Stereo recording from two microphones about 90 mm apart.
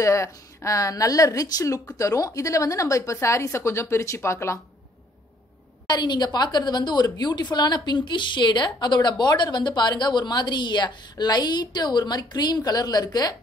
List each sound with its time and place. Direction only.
0.0 s speech: 35° left (ahead or behind)
5.9 s a woman's voice: 55° left (ahead or behind)